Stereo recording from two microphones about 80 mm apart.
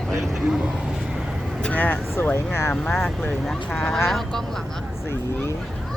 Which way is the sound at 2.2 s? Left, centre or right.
Left.